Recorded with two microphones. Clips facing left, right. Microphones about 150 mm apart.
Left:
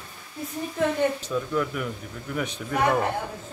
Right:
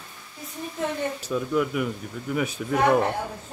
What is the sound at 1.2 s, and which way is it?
Speech, 10° right (ahead or behind).